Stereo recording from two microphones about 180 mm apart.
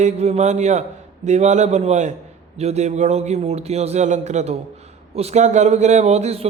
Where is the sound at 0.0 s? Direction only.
40° right (ahead or behind).